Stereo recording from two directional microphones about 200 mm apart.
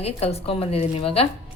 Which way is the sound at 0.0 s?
30° left (ahead or behind).